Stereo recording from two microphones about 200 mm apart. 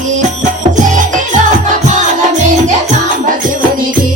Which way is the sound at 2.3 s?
35° right (ahead or behind).